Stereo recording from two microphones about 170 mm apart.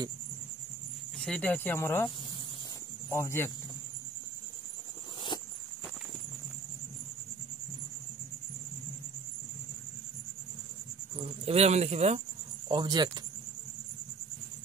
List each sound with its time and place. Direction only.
1.2 s speech: 5° left (ahead or behind)
3.1 s speech: 15° left (ahead or behind)
5.3 s walk: 30° left (ahead or behind)
11.1 s speech: 35° right (ahead or behind)
12.6 s speech: 25° right (ahead or behind)